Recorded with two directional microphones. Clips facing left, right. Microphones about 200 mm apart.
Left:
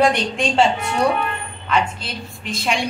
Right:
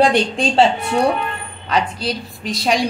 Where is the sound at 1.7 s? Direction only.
35° right (ahead or behind).